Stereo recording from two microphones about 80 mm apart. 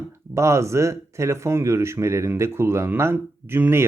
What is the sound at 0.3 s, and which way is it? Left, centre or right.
Speech, right.